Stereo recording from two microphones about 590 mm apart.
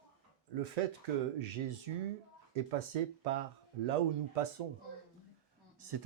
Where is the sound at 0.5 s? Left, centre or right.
Right.